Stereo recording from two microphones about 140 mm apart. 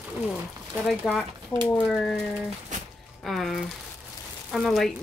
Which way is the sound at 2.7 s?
60° right (ahead or behind).